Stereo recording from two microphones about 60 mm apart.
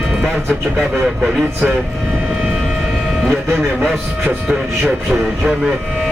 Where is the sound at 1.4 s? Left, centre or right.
Right.